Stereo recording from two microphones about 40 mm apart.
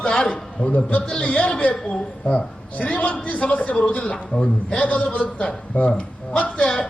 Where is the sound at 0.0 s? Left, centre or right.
Left.